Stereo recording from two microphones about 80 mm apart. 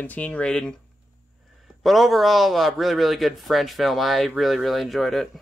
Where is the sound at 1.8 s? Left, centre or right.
Centre.